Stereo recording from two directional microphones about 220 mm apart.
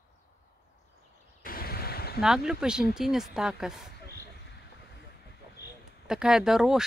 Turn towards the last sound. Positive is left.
turn(degrees=0)  # may be behind; listen again after turning